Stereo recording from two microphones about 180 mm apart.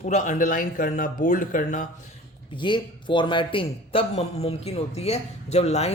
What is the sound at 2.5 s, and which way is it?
A man's voice, 25° left (ahead or behind).